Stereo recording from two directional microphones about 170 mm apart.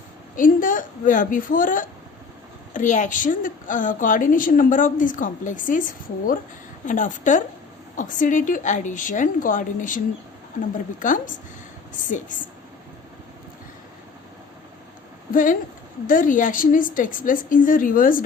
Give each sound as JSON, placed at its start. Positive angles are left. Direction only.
{"t": 0.3, "sound": "a woman's voice", "side_deg": 50}
{"t": 11.0, "sound": "a woman's voice", "side_deg": 50}
{"t": 15.3, "sound": "a woman's voice", "side_deg": 50}